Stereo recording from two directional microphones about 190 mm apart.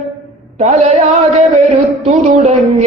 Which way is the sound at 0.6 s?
35° right (ahead or behind).